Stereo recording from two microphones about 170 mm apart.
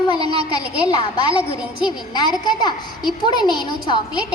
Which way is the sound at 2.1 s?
25° left (ahead or behind).